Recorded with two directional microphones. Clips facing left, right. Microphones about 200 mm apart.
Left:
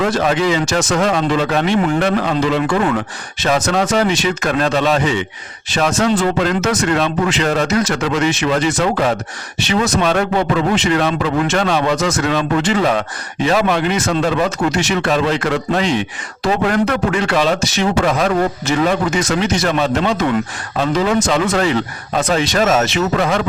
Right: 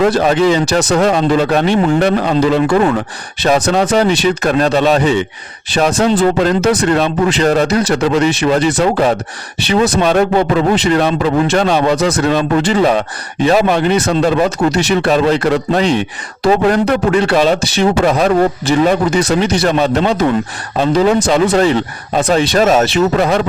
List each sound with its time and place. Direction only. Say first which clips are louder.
0.0 s a man's voice: right 5 dB; 35° right (ahead or behind)